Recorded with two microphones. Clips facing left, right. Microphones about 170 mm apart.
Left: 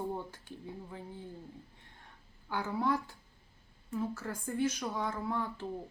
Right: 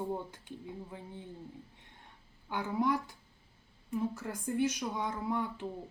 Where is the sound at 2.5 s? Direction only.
15° right (ahead or behind).